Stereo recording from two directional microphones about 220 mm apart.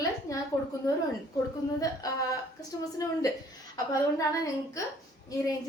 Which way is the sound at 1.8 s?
15° left (ahead or behind).